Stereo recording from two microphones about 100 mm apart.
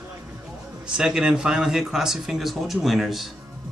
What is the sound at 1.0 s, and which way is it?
Speech, 5° right (ahead or behind).